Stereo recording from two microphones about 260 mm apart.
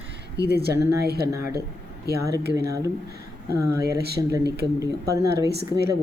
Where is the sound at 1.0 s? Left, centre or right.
Right.